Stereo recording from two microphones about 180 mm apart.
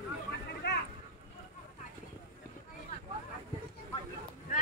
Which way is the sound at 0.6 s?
70° left (ahead or behind).